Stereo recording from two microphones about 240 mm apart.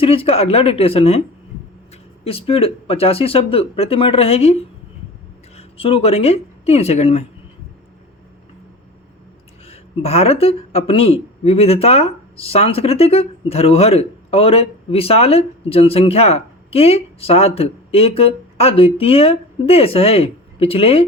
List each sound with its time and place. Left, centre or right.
0.0 s speech: left
2.2 s speech: left
5.5 s speech: left
9.6 s speech: left